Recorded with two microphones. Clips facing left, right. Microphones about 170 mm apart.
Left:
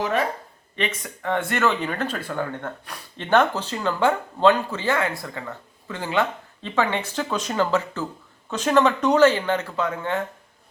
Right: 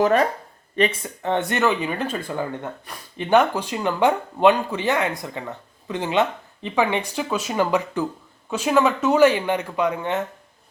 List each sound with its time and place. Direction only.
0.0 s speech: 45° right (ahead or behind)
0.8 s speech: 30° right (ahead or behind)